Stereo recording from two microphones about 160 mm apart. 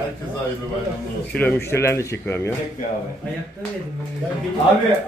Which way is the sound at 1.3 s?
10° left (ahead or behind).